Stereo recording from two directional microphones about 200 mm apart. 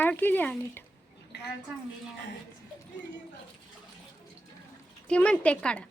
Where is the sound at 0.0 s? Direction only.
10° left (ahead or behind).